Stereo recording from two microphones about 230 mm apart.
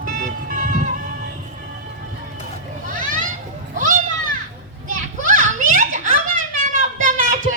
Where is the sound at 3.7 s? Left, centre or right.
Right.